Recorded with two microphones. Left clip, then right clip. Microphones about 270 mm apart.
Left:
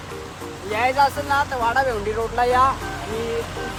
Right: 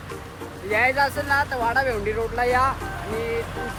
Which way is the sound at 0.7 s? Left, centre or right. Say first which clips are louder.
Left 2 dB; centre.